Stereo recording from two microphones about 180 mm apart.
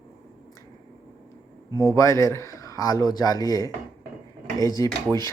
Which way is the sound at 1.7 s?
20° right (ahead or behind).